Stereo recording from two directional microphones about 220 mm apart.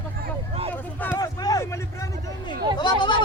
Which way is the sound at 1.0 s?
15° left (ahead or behind).